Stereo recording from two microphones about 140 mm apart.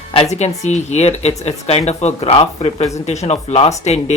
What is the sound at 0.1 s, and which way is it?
Speech, 50° left (ahead or behind).